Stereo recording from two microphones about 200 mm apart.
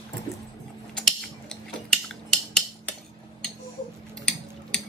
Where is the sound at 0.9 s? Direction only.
5° left (ahead or behind).